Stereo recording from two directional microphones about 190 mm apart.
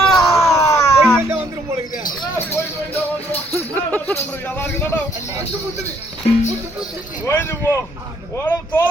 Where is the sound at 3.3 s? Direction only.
10° left (ahead or behind).